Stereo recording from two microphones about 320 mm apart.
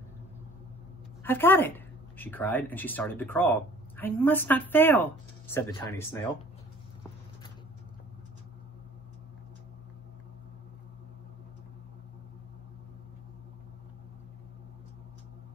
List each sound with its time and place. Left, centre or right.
1.2 s speech: centre